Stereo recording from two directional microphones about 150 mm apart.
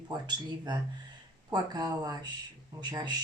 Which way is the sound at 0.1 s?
30° right (ahead or behind).